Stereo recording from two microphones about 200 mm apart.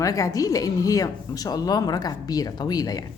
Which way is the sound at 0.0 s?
15° left (ahead or behind).